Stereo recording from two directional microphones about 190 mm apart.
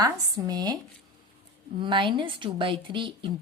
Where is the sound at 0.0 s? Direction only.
20° right (ahead or behind).